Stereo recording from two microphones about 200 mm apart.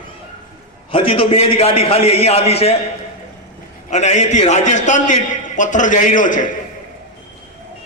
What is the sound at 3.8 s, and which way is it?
A man's voice, 35° left (ahead or behind).